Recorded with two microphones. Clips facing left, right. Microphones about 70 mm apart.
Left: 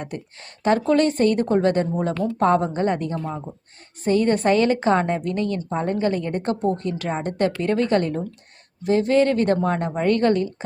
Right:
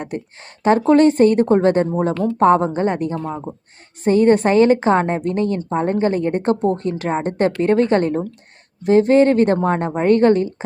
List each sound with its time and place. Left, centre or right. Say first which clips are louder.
0.0 s a woman's voice: right 5 dB; right